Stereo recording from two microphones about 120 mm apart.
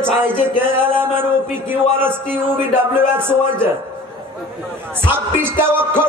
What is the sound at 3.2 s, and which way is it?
Speech, 20° right (ahead or behind).